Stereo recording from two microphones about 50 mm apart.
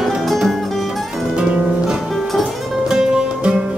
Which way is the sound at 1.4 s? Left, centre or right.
Centre.